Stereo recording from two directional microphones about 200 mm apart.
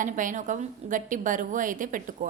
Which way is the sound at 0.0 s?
40° right (ahead or behind).